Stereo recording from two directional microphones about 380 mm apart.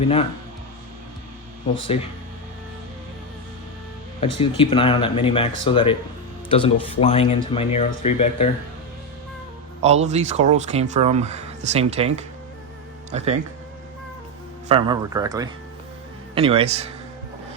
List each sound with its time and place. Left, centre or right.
0.0 s speech: centre
4.4 s speech: centre
9.8 s speech: centre
14.7 s speech: centre